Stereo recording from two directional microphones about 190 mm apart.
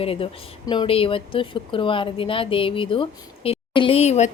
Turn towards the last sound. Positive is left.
turn(degrees=35)  # may be behind; listen again after turning